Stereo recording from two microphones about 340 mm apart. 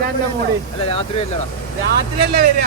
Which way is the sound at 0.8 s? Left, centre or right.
Centre.